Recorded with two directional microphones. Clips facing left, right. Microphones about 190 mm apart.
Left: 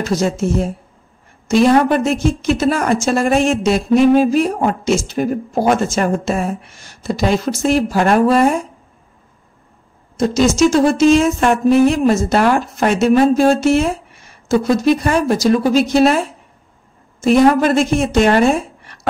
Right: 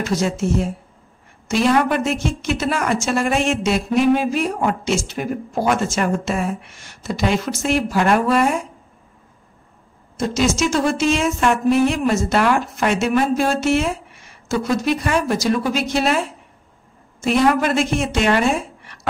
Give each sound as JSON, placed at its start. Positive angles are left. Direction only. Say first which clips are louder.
{"t": 0.0, "sound": "a woman's voice", "louder": "left 3 dB", "side_deg": 40}
{"t": 10.1, "sound": "a woman's voice", "louder": "left 5 dB", "side_deg": 35}
{"t": 17.2, "sound": "a woman's voice", "louder": "left 5 dB", "side_deg": 35}